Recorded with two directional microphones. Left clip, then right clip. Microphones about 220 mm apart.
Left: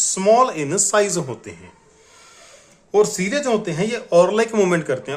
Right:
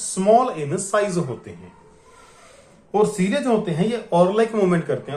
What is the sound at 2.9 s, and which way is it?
A man's voice, 40° left (ahead or behind).